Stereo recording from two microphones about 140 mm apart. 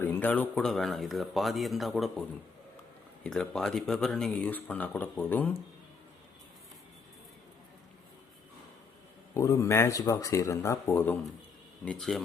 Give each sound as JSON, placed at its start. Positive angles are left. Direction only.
{"t": 0.0, "sound": "speech", "side_deg": 15}
{"t": 3.2, "sound": "speech", "side_deg": 5}
{"t": 9.3, "sound": "speech", "side_deg": 20}
{"t": 11.9, "sound": "speech", "side_deg": 5}